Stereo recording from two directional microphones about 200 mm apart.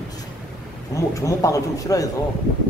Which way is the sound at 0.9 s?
15° left (ahead or behind).